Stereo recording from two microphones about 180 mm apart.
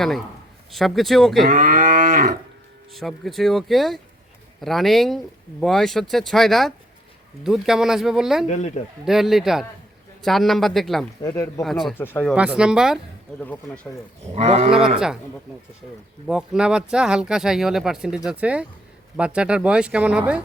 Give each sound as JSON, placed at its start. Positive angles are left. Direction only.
{"t": 0.7, "sound": "speech", "side_deg": 0}
{"t": 1.5, "sound": "cattle", "side_deg": -50}
{"t": 2.9, "sound": "speech", "side_deg": 0}
{"t": 8.4, "sound": "speech", "side_deg": 40}
{"t": 9.0, "sound": "speech", "side_deg": 0}
{"t": 11.2, "sound": "speech", "side_deg": 20}
{"t": 11.6, "sound": "speech", "side_deg": 0}
{"t": 11.9, "sound": "speech", "side_deg": 10}
{"t": 12.3, "sound": "speech", "side_deg": -5}
{"t": 13.4, "sound": "speech", "side_deg": 10}
{"t": 14.3, "sound": "livestock", "side_deg": -35}
{"t": 14.7, "sound": "speech", "side_deg": -5}
{"t": 16.2, "sound": "speech", "side_deg": -5}